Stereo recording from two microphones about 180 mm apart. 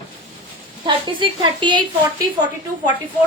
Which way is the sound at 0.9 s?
25° right (ahead or behind).